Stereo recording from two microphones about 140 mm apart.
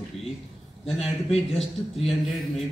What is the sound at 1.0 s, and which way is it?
Speech, 45° left (ahead or behind).